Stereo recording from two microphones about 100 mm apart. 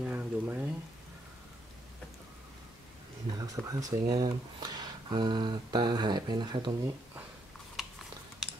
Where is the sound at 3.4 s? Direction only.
35° right (ahead or behind).